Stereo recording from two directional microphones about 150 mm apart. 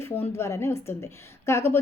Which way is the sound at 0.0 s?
15° left (ahead or behind).